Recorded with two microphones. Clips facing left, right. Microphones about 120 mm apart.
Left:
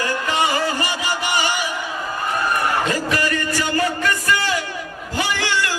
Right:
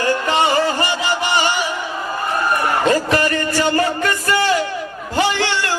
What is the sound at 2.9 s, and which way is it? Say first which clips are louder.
Music: right 5 dB; 35° right (ahead or behind).